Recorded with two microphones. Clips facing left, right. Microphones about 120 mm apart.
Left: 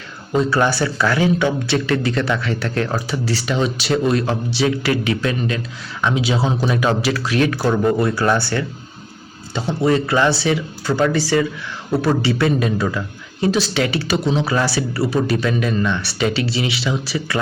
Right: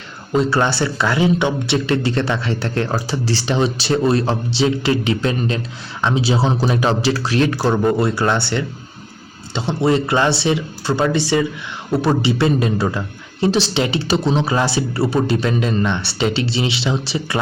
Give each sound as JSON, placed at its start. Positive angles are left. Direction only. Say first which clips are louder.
{"t": 0.5, "sound": "a man's voice", "louder": "even", "side_deg": -25}